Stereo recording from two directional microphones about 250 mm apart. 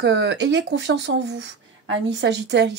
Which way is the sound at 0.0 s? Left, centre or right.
Right.